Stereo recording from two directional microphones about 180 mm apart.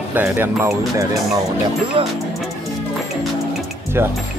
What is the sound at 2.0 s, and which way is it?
Speech, 30° right (ahead or behind).